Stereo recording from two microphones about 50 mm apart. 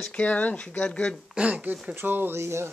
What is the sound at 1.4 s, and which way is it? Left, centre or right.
Speech, right.